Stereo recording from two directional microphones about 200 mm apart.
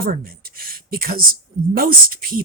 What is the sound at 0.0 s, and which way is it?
Speech, 50° right (ahead or behind).